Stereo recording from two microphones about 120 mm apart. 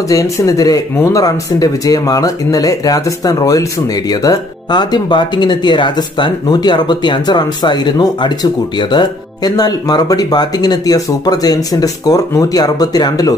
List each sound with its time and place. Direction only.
0.1 s speech: 30° left (ahead or behind)